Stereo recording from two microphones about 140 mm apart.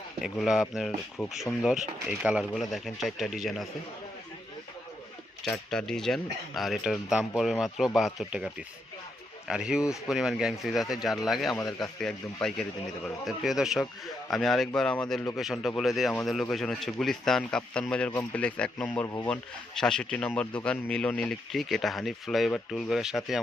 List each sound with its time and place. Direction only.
0.2 s speech: centre (ahead or behind)
2.0 s speech: 5° right (ahead or behind)
5.5 s speech: 5° left (ahead or behind)
19.0 s speech: 20° left (ahead or behind)
19.3 s speech: 5° left (ahead or behind)